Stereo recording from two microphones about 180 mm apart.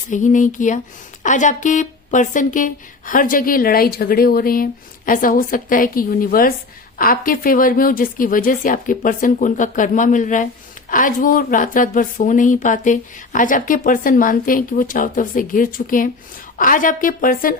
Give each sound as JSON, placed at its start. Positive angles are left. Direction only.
{"t": 0.1, "sound": "a woman's voice", "side_deg": 45}